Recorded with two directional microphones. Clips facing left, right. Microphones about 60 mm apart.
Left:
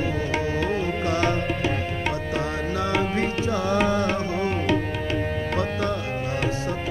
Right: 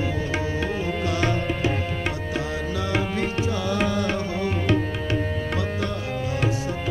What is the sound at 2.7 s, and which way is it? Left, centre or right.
Music, left.